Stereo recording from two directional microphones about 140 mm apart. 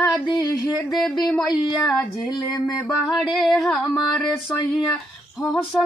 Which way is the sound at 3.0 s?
Centre (ahead or behind).